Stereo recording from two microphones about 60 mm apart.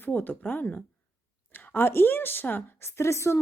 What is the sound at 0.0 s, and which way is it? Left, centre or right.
Speech, left.